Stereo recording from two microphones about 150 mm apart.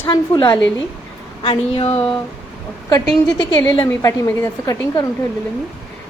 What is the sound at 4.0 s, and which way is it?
A woman's voice, 25° left (ahead or behind).